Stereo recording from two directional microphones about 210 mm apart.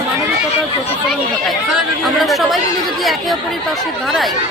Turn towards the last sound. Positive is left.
turn(degrees=0)  # may be behind; listen again after turning